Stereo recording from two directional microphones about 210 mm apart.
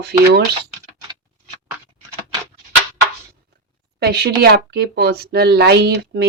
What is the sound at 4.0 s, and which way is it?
Speech, 50° right (ahead or behind).